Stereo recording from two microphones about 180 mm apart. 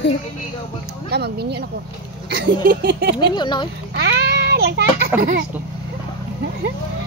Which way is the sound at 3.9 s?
70° right (ahead or behind).